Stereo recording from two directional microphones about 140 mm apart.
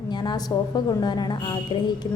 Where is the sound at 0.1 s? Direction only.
30° left (ahead or behind).